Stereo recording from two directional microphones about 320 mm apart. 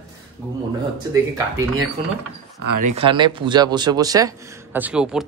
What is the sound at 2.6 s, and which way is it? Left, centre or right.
Speech, right.